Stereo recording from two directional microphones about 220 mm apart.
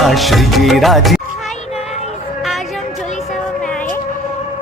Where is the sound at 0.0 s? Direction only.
Centre (ahead or behind).